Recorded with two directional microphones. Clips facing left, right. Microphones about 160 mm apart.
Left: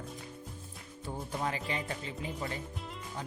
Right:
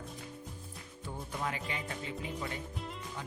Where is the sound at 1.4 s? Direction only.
35° left (ahead or behind).